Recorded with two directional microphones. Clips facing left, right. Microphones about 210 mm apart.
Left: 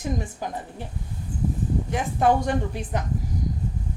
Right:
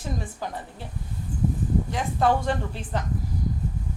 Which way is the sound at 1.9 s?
20° left (ahead or behind).